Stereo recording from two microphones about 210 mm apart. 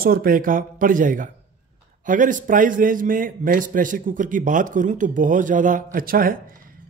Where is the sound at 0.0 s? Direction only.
45° right (ahead or behind).